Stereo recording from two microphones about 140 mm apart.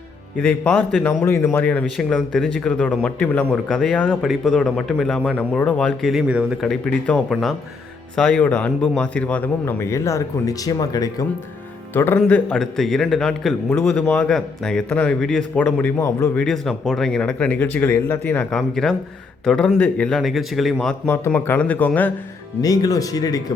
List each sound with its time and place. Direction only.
0.3 s a man's voice: 10° left (ahead or behind); by 11.3 s 25° left (ahead or behind)
11.9 s a man's voice: 15° left (ahead or behind)
16.0 s speech: 20° left (ahead or behind)
16.3 s a man's voice: 5° left (ahead or behind)
20.7 s a man's voice: 10° left (ahead or behind)
22.6 s speech: 25° left (ahead or behind)